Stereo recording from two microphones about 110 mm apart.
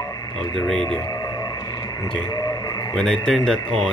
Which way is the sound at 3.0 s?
5° left (ahead or behind).